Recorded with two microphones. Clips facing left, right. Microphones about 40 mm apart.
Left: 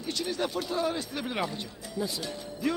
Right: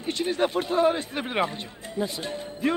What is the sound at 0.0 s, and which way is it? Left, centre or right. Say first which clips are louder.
A man's voice: right 6 dB; right.